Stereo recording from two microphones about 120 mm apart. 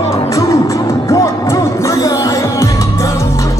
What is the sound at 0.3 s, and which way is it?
Music, 30° left (ahead or behind).